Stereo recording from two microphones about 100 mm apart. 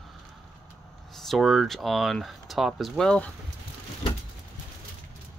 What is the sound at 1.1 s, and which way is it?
Speech, centre (ahead or behind).